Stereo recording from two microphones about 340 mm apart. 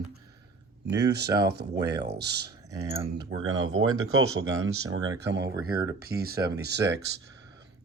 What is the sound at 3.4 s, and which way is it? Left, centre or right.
Speech, right.